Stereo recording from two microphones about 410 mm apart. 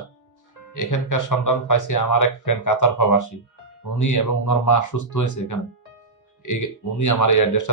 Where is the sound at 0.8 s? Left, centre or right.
Left.